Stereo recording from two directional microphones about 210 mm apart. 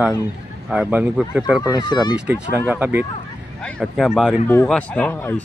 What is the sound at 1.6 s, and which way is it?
Speech, 20° left (ahead or behind).